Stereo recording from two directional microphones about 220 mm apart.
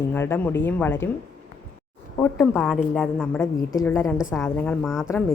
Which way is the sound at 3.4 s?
10° left (ahead or behind).